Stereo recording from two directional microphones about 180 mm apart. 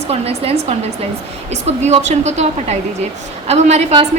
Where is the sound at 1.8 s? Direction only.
40° right (ahead or behind).